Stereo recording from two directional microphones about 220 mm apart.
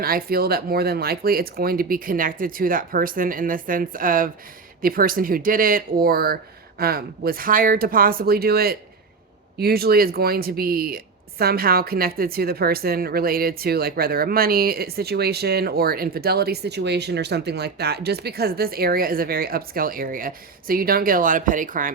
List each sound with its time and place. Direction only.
0.0 s speech: 40° right (ahead or behind)